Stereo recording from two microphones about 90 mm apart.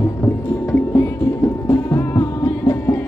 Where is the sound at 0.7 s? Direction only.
35° left (ahead or behind).